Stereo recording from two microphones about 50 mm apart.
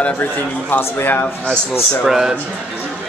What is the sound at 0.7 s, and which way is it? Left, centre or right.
Speech, left.